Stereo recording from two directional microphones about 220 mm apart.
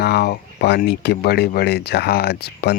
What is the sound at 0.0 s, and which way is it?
Speech, 50° left (ahead or behind).